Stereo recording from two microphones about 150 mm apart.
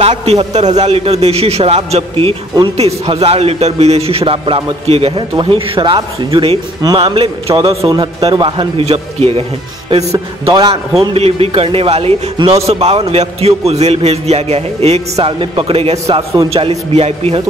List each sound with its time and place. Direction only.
0.0 s a man's voice: 45° right (ahead or behind)
6.8 s a man's voice: 25° right (ahead or behind)
7.9 s a man's voice: 25° right (ahead or behind)
10.4 s a man's voice: 40° right (ahead or behind)